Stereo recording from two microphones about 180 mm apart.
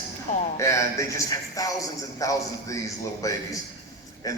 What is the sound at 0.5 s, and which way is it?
A man's voice, 15° left (ahead or behind).